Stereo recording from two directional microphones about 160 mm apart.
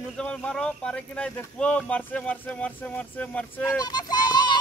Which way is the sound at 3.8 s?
25° left (ahead or behind).